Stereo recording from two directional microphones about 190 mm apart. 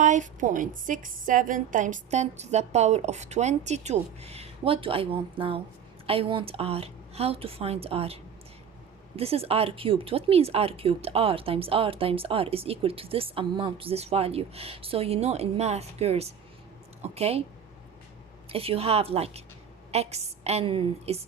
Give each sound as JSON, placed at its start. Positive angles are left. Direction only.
{"t": 0.0, "sound": "speech", "side_deg": -40}
{"t": 18.5, "sound": "speech", "side_deg": -30}